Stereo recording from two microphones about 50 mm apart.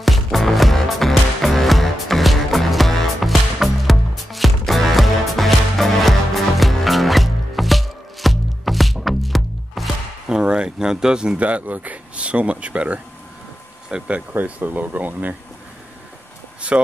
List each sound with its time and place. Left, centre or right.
0.0 s music: centre
10.2 s a sound: centre
11.3 s speech: right
13.8 s speech: centre
14.3 s speech: right
16.6 s speech: right